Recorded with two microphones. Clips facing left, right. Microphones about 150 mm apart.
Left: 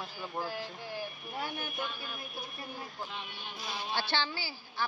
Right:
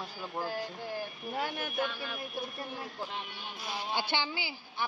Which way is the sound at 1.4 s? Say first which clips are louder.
Right 4 dB; 90° right.